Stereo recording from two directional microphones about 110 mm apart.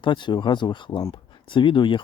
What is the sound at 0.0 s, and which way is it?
Speech, 45° left (ahead or behind).